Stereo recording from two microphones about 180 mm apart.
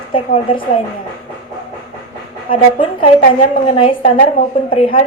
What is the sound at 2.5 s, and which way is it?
A woman's voice, 30° left (ahead or behind).